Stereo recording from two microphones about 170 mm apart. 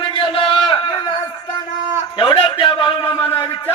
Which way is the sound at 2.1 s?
30° left (ahead or behind).